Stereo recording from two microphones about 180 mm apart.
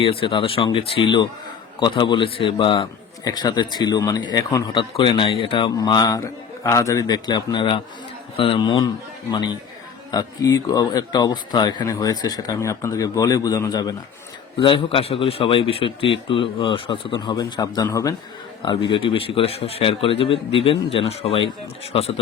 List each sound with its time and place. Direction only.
0.0 s a man's voice: 30° left (ahead or behind)